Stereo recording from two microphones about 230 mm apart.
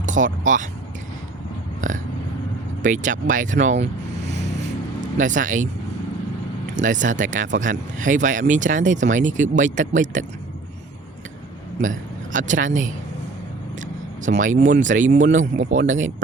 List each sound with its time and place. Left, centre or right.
0.0 s vehicle: right
0.4 s speech: right
1.8 s burping: right
2.8 s speech: right
6.8 s speech: right
11.8 s speech: right